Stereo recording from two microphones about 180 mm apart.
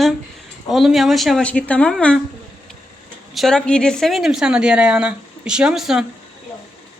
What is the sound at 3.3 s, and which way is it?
Speech, 5° left (ahead or behind).